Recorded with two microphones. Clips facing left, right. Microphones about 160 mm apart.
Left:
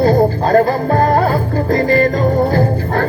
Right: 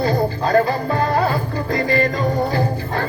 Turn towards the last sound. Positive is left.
turn(degrees=50)  # may be behind; listen again after turning